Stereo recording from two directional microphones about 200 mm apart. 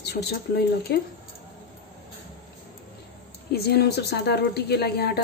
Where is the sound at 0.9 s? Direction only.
55° left (ahead or behind).